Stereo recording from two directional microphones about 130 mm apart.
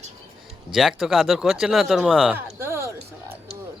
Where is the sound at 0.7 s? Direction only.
5° right (ahead or behind).